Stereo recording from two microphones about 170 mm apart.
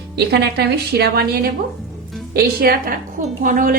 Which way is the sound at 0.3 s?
75° right (ahead or behind).